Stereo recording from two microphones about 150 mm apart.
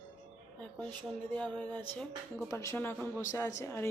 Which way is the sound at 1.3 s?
10° left (ahead or behind).